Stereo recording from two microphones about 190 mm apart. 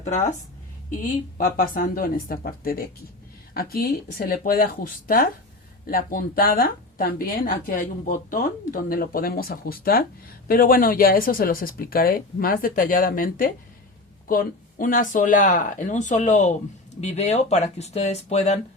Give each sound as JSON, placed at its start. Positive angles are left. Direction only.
{"t": 0.0, "sound": "a woman's voice", "side_deg": 40}
{"t": 1.5, "sound": "speech", "side_deg": 50}